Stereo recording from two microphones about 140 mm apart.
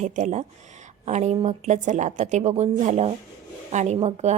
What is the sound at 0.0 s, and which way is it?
Speech, 55° right (ahead or behind).